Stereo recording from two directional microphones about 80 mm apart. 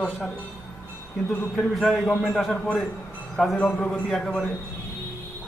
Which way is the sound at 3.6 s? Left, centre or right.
Centre.